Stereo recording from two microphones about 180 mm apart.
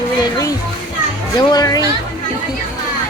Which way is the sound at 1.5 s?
20° left (ahead or behind).